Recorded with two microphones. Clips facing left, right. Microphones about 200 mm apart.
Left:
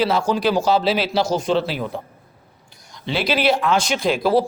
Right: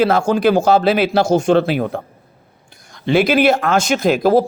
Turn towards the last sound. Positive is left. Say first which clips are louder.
# right 5 dB
turn(degrees=-45)  # may be behind; listen again after turning